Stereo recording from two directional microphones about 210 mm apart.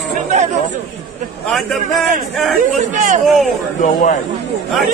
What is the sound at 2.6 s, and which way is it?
Speech, 35° right (ahead or behind).